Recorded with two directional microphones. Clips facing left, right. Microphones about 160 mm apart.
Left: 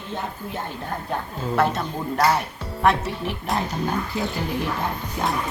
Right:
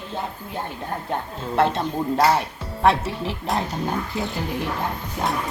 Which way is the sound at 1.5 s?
25° right (ahead or behind).